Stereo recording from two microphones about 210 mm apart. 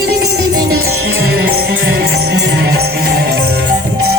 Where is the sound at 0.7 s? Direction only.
45° right (ahead or behind).